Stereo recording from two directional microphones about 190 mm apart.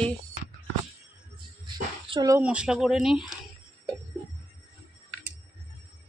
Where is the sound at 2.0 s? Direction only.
25° right (ahead or behind).